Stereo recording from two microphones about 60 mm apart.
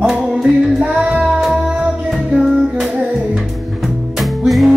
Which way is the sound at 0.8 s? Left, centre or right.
Centre.